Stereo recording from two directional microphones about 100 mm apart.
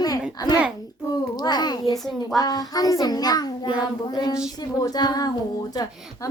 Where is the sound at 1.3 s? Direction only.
45° left (ahead or behind).